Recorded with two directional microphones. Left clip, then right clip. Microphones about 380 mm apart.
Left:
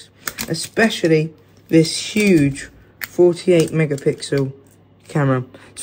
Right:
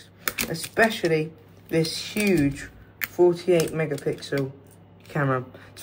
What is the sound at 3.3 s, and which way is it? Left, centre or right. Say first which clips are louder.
Speech: left 7 dB; centre.